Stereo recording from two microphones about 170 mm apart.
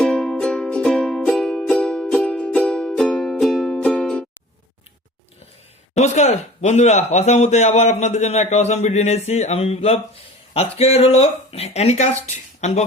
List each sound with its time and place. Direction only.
0.0 s music: 5° left (ahead or behind)
5.9 s speech: 40° left (ahead or behind)
12.5 s a sound: 40° left (ahead or behind)